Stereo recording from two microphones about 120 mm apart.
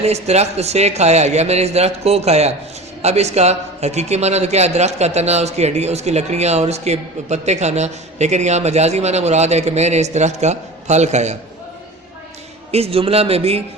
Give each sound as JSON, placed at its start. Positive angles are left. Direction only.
{"t": 0.0, "sound": "a man's voice", "side_deg": -65}
{"t": 12.7, "sound": "speech", "side_deg": -55}